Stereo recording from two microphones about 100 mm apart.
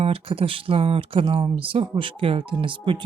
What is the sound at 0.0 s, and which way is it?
Speech, 70° right (ahead or behind).